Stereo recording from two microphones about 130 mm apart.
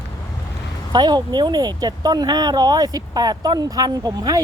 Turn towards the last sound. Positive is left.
turn(degrees=-30)  # may be behind; listen again after turning